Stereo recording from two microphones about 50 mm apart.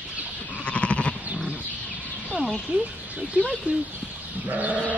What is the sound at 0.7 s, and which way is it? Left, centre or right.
Sheep, left.